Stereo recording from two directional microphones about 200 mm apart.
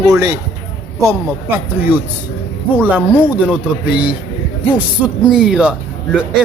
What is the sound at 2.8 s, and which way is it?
Speech, 10° right (ahead or behind).